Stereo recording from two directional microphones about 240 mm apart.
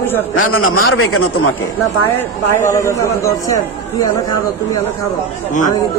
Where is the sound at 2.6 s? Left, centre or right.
Centre.